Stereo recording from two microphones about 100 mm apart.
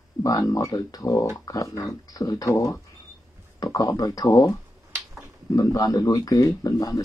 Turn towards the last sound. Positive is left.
turn(degrees=35)  # may be behind; listen again after turning